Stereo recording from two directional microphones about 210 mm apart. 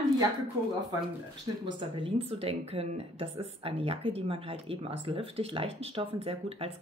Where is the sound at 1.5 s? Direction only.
20° right (ahead or behind).